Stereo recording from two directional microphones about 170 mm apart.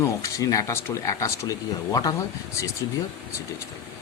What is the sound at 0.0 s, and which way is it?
Speech, 20° left (ahead or behind).